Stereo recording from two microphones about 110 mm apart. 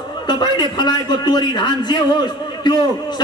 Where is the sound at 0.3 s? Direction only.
40° left (ahead or behind).